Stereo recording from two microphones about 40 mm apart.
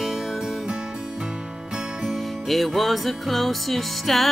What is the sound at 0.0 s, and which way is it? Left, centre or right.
Music, centre.